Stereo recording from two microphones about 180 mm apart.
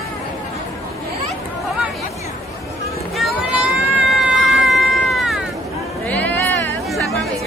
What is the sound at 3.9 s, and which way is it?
Cat, centre (ahead or behind).